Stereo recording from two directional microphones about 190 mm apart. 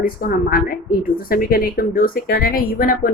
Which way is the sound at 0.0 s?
50° left (ahead or behind).